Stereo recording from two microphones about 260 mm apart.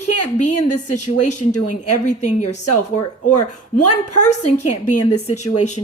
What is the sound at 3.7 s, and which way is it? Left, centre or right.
A woman's voice, left.